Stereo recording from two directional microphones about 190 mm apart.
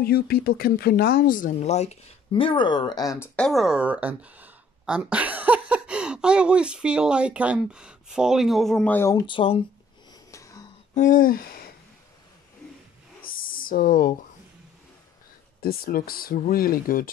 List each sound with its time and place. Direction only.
0.0 s speech: 55° left (ahead or behind); by 3.3 s 20° left (ahead or behind)
3.3 s speech: centre (ahead or behind); by 9.6 s 25° left (ahead or behind)
10.3 s whispering: 15° left (ahead or behind)
11.0 s speech: 45° left (ahead or behind)
13.2 s a sound: 50° left (ahead or behind)
15.6 s speech: 50° left (ahead or behind)